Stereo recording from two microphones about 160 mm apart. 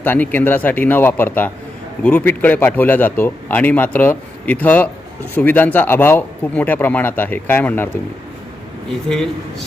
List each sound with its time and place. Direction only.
0.0 s a man's voice: 10° left (ahead or behind)